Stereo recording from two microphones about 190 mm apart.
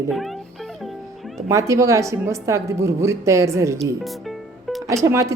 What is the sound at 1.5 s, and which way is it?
Speech, 15° right (ahead or behind).